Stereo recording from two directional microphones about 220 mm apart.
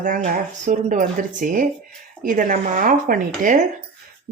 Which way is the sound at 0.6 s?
35° right (ahead or behind).